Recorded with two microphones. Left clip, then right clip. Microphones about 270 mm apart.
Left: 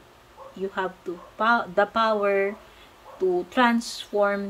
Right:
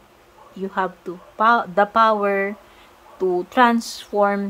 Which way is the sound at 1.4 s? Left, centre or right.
Centre.